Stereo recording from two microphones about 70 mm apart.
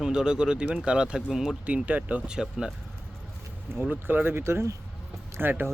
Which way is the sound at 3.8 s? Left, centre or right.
Right.